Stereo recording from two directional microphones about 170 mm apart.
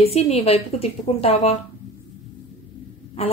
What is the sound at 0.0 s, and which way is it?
A woman's voice, 35° left (ahead or behind).